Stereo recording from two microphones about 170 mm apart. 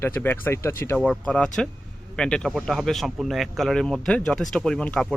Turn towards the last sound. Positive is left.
turn(degrees=5)  # may be behind; listen again after turning